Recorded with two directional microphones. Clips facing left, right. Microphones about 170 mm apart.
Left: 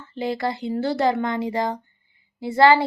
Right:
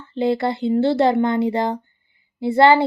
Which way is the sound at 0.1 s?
30° right (ahead or behind).